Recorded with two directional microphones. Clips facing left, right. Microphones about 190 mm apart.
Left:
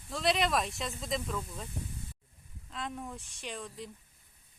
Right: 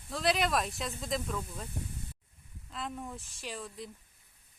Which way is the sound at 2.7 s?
Centre (ahead or behind).